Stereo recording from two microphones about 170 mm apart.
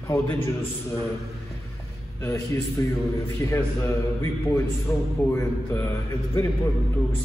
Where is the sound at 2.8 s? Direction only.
20° left (ahead or behind).